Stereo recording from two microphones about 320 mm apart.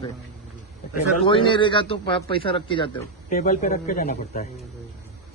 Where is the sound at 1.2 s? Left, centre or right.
Centre.